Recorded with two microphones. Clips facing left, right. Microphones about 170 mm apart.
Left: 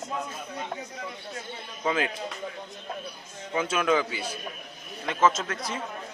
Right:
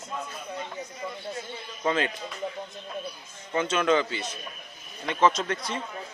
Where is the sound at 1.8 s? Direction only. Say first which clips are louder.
Right 1 dB; 5° left (ahead or behind).